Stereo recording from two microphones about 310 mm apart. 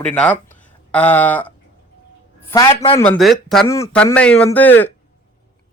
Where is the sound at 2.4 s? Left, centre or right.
Centre.